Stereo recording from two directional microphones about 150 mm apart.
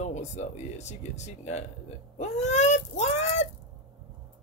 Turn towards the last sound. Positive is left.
turn(degrees=50)  # may be behind; listen again after turning